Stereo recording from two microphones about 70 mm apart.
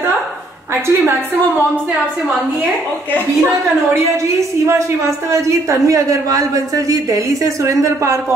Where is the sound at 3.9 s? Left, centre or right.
Right.